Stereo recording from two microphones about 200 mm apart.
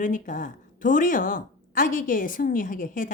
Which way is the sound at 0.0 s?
40° left (ahead or behind).